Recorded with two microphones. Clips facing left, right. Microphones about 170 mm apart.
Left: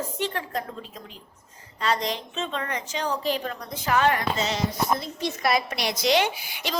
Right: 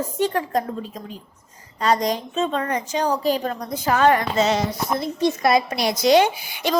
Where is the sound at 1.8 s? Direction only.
40° right (ahead or behind).